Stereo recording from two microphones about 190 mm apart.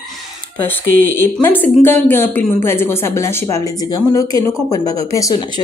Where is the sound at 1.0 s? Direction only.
10° left (ahead or behind).